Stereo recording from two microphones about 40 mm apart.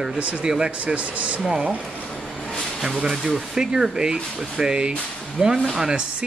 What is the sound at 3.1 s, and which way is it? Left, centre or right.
Speech, centre.